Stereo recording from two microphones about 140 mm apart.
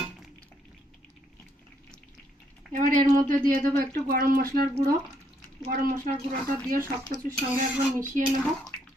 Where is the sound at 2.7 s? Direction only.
70° right (ahead or behind); by 4.6 s 90° right.